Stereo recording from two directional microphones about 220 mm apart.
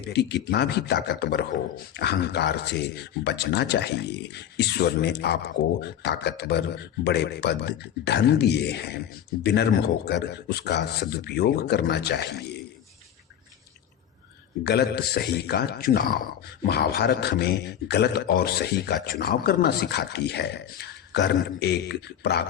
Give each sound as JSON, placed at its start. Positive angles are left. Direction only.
{"t": 0.1, "sound": "speech", "side_deg": 50}
{"t": 14.6, "sound": "speech", "side_deg": 45}